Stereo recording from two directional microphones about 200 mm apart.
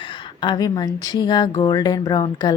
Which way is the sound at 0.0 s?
25° left (ahead or behind).